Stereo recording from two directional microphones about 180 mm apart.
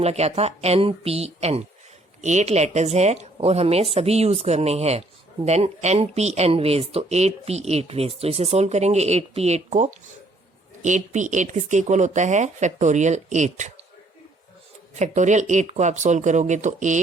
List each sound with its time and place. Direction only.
0.0 s speech: 35° right (ahead or behind)
14.9 s speech: 40° right (ahead or behind)